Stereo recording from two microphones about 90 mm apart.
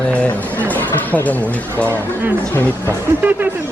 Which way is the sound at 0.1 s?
15° left (ahead or behind).